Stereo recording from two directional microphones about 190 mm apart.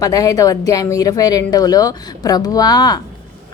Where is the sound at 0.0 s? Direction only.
20° left (ahead or behind).